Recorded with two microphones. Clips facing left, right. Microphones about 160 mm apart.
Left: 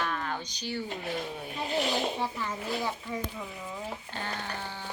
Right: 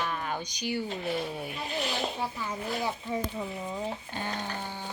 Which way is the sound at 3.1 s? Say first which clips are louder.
Right 3 dB; 25° right (ahead or behind).